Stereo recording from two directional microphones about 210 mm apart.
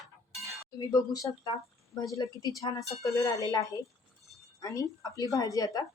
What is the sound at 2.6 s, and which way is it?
A woman's voice, 20° left (ahead or behind).